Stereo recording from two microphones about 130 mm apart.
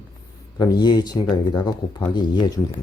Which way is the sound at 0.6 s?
30° left (ahead or behind).